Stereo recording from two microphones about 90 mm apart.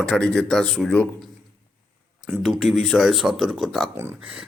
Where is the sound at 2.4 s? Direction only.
Centre (ahead or behind).